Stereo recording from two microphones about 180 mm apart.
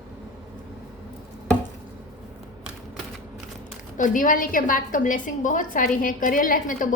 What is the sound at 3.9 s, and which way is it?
A woman's voice, 45° left (ahead or behind).